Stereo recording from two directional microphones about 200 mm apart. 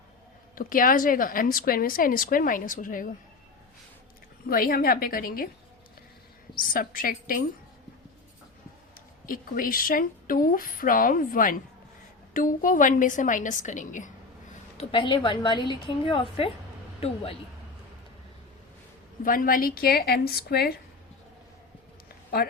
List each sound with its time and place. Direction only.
0.5 s a woman's voice: 45° left (ahead or behind)
4.4 s a woman's voice: 45° left (ahead or behind)
6.7 s a woman's voice: 45° left (ahead or behind)
9.2 s a woman's voice: 45° left (ahead or behind)
14.8 s a woman's voice: 25° left (ahead or behind)
19.2 s a woman's voice: 45° left (ahead or behind)
22.4 s speech: 50° left (ahead or behind)